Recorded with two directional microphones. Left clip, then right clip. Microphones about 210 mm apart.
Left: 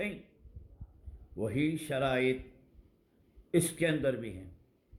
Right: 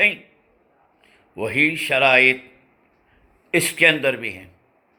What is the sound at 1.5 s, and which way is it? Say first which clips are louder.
Speech: right 16 dB; 45° right (ahead or behind).